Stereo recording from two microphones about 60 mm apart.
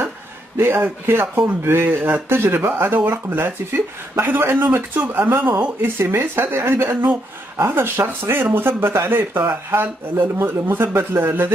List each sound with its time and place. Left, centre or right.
0.6 s speech: right